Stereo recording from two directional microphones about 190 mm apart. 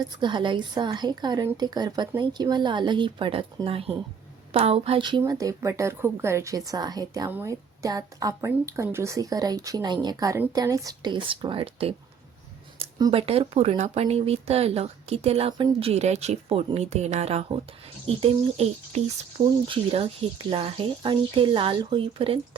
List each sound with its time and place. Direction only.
0.2 s a woman's voice: 25° right (ahead or behind)
13.0 s a woman's voice: 30° right (ahead or behind)